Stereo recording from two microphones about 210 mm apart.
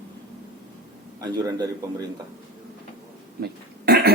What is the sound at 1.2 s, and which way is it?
Speech, 20° right (ahead or behind).